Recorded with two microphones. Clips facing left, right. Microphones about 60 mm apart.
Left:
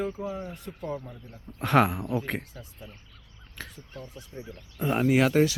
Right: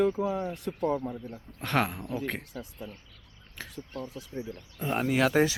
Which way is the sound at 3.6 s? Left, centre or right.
Centre.